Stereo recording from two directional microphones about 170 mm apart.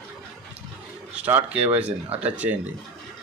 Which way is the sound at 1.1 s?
10° right (ahead or behind).